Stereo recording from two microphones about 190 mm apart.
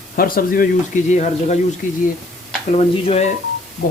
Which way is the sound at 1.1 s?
40° left (ahead or behind).